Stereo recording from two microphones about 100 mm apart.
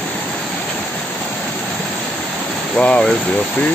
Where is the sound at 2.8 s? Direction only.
10° left (ahead or behind).